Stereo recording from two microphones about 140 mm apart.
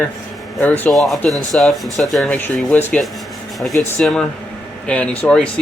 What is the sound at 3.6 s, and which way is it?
Speech, centre (ahead or behind).